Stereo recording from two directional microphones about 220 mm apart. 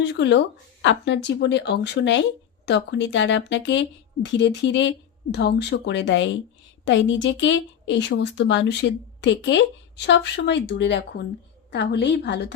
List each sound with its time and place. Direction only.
0.0 s speech: 55° left (ahead or behind)